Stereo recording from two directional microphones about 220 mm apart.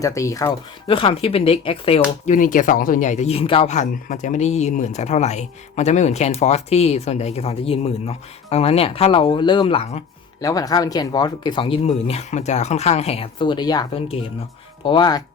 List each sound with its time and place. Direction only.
0.0 s speech: 15° left (ahead or behind)